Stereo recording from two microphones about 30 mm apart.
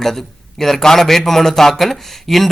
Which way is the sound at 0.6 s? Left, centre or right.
Centre.